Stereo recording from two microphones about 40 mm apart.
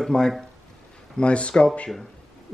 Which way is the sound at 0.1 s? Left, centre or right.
Centre.